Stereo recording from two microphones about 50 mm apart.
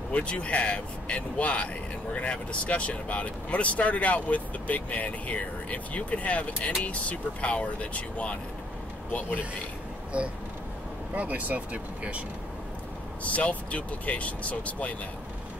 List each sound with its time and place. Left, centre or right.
0.1 s speech: left
10.1 s speech: right
13.2 s speech: left